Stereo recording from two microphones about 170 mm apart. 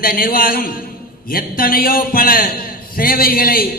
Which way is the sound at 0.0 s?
60° left (ahead or behind).